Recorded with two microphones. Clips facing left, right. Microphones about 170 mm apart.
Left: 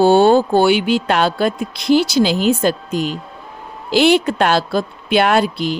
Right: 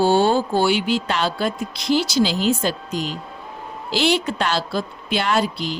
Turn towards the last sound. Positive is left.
turn(degrees=55)  # may be behind; listen again after turning